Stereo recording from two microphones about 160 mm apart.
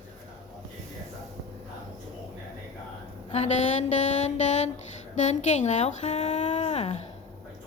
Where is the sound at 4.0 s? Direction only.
45° left (ahead or behind).